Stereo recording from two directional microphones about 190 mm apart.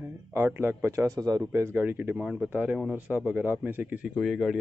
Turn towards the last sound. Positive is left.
turn(degrees=0)  # may be behind; listen again after turning